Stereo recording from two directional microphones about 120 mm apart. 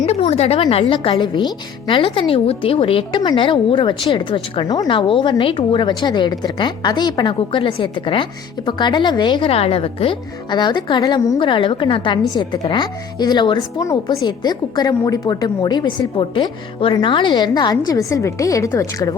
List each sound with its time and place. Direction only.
0.0 s speech: 65° left (ahead or behind); by 4.9 s 30° left (ahead or behind)
4.9 s speech: 45° left (ahead or behind)
9.5 s speech: 55° left (ahead or behind); by 19.1 s 25° left (ahead or behind)